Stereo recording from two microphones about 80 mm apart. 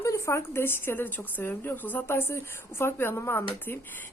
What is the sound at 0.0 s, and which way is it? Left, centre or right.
Speech, left.